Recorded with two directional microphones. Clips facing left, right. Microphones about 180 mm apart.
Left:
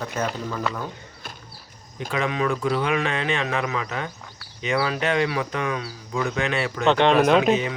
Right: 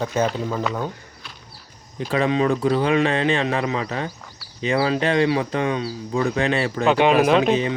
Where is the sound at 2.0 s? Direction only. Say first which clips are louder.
Right 5 dB; 35° right (ahead or behind).